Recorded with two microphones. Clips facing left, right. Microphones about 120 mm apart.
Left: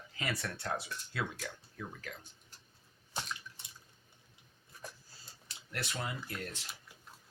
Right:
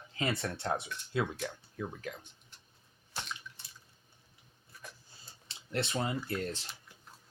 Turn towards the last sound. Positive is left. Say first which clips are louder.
# right 6 dB
turn(degrees=-30)  # may be behind; listen again after turning